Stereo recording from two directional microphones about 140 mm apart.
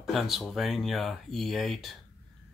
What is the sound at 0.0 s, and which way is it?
Speech, centre (ahead or behind).